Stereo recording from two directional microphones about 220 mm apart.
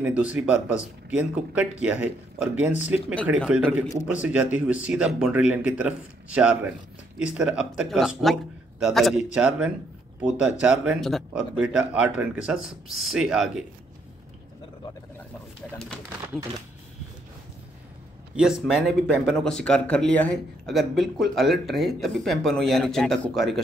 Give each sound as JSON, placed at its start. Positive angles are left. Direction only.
{"t": 0.0, "sound": "speech", "side_deg": -5}
{"t": 18.3, "sound": "speech", "side_deg": -5}